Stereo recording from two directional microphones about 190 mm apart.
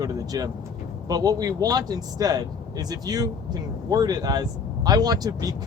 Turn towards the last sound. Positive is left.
turn(degrees=-20)  # may be behind; listen again after turning